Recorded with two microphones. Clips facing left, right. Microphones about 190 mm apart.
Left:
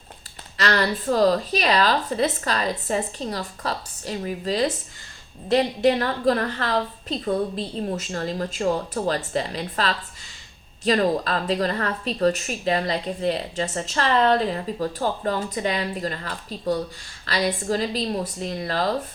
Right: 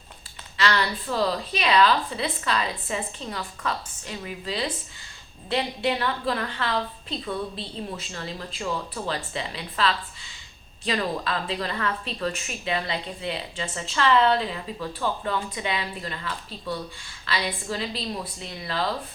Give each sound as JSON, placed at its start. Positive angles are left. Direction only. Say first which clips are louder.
{"t": 0.5, "sound": "a woman's voice", "louder": "left 2 dB", "side_deg": 45}